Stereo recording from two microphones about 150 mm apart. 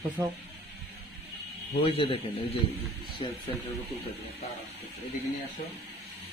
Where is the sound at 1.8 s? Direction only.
40° left (ahead or behind).